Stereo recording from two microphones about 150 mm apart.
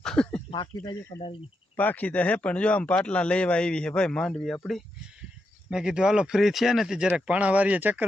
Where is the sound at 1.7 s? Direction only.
10° left (ahead or behind).